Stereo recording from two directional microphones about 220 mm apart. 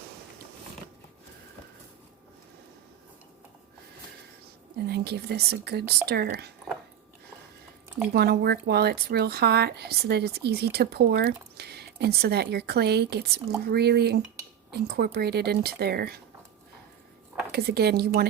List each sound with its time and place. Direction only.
4.9 s speech: 50° right (ahead or behind)
8.1 s speech: 45° right (ahead or behind)
17.5 s speech: 45° right (ahead or behind)